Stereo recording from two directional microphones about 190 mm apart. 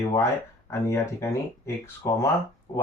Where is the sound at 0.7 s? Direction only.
15° left (ahead or behind).